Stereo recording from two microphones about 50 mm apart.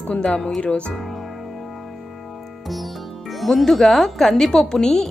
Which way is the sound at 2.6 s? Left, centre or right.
Centre.